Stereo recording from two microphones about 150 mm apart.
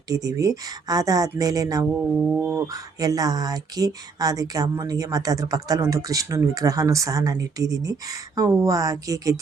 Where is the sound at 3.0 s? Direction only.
25° right (ahead or behind).